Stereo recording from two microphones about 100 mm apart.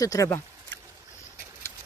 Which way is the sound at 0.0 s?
35° left (ahead or behind).